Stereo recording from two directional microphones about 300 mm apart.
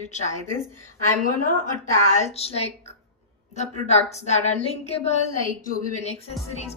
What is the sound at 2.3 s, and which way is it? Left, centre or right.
A woman's voice, centre.